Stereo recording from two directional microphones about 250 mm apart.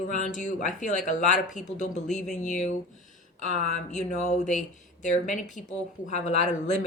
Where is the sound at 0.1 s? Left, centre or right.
Left.